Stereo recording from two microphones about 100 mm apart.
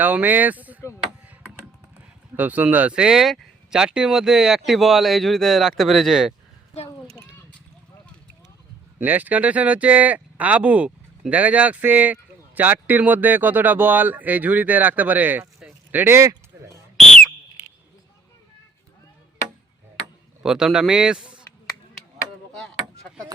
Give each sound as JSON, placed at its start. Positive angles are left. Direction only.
{"t": 0.0, "sound": "speech", "side_deg": -15}
{"t": 2.3, "sound": "speech", "side_deg": -15}
{"t": 9.0, "sound": "speech", "side_deg": -15}
{"t": 20.4, "sound": "speech", "side_deg": -5}